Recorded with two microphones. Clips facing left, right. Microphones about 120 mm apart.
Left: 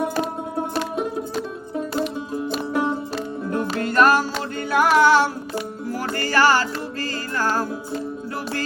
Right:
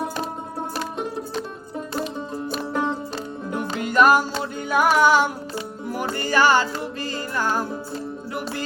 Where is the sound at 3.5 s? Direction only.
15° right (ahead or behind).